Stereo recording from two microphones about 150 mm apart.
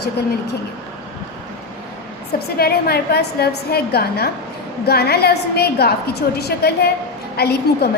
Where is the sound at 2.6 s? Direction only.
90° left.